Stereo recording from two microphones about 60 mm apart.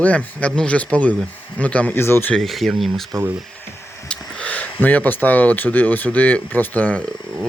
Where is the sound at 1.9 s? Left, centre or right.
Left.